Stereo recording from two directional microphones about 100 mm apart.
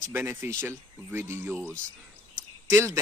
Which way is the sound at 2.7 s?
25° right (ahead or behind).